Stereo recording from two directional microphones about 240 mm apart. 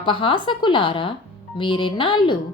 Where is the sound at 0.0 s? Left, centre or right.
Left.